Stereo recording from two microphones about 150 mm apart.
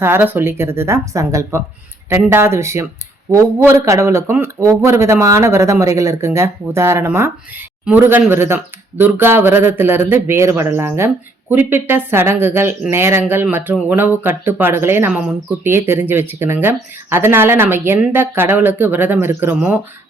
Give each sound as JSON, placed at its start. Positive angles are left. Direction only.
{"t": 0.0, "sound": "a man's voice", "side_deg": -15}